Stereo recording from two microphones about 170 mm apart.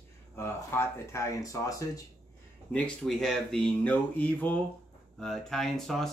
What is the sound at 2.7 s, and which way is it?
Speech, 5° left (ahead or behind).